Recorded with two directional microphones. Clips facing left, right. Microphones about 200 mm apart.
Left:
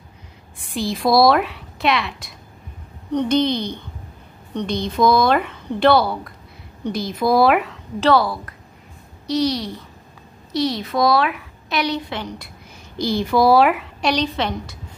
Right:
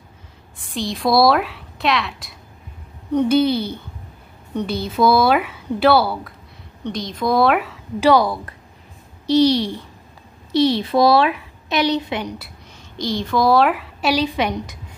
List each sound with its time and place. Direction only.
0.7 s a woman's voice: centre (ahead or behind)
6.8 s a woman's voice: 5° left (ahead or behind)
8.1 s speech: 15° right (ahead or behind)
9.2 s a child's voice: 30° right (ahead or behind); by 12.4 s 15° right (ahead or behind)
12.9 s a woman's voice: 10° left (ahead or behind); by 14.8 s 15° right (ahead or behind)